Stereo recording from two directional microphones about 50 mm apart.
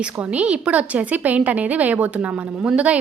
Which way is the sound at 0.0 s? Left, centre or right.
Right.